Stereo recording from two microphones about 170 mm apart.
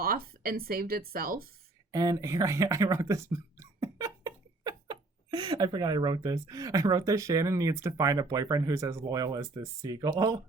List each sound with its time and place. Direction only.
0.0 s speech: 60° right (ahead or behind)
1.9 s speech: 20° right (ahead or behind)